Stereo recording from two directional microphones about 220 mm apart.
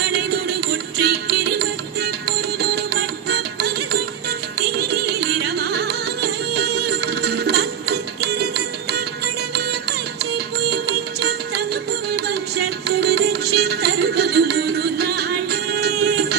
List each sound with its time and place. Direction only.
0.9 s music: 50° right (ahead or behind)
10.3 s music: 50° right (ahead or behind)